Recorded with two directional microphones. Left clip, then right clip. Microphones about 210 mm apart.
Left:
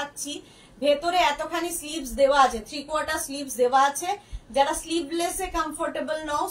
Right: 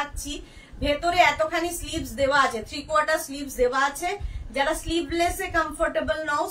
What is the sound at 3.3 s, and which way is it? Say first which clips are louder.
Speech: left 1 dB; 15° right (ahead or behind).